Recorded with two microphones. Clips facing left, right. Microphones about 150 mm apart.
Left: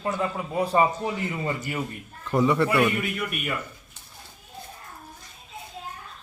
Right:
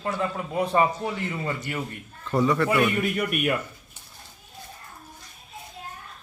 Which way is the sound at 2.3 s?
20° left (ahead or behind).